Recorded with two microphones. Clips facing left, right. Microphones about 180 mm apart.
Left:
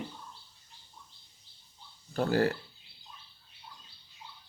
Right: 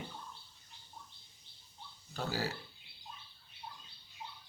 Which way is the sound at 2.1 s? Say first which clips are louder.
Left 11 dB; 55° left (ahead or behind).